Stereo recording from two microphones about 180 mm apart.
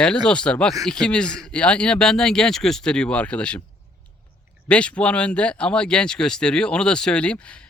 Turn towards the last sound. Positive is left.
turn(degrees=5)  # may be behind; listen again after turning